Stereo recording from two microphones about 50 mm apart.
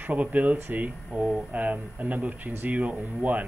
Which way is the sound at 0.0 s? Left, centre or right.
Right.